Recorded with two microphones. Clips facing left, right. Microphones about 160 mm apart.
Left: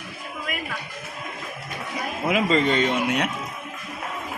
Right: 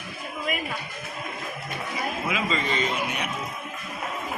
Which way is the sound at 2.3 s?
60° left (ahead or behind).